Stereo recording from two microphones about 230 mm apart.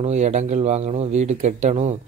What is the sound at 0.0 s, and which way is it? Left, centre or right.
Speech, right.